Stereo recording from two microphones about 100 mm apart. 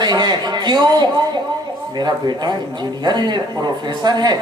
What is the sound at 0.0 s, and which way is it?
A man's voice, 45° right (ahead or behind).